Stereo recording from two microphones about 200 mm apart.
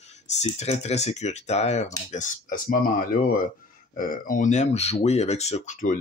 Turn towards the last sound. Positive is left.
turn(degrees=35)  # may be behind; listen again after turning